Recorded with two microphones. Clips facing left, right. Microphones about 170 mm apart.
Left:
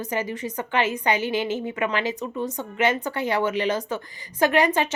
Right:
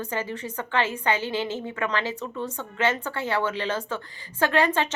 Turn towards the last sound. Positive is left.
turn(degrees=10)  # may be behind; listen again after turning